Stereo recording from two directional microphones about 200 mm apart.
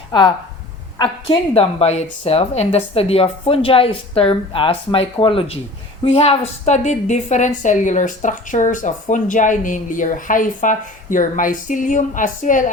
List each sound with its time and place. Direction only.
0.1 s a woman's voice: 20° left (ahead or behind); by 12.7 s 40° left (ahead or behind)